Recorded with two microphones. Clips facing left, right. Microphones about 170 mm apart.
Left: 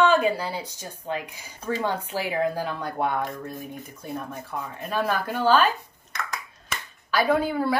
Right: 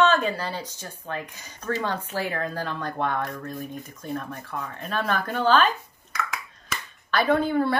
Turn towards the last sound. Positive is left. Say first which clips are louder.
# right 1 dB
turn(degrees=5)  # may be behind; listen again after turning